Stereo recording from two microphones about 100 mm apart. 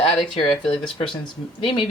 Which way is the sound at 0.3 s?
60° left (ahead or behind).